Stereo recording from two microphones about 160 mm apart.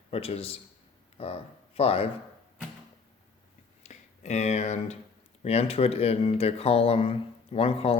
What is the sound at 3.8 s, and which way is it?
Speech, 45° left (ahead or behind).